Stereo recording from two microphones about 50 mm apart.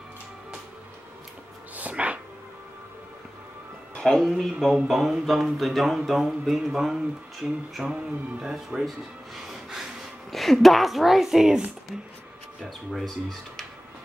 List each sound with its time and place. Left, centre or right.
1.8 s dog: right
4.0 s speech: centre
12.6 s speech: centre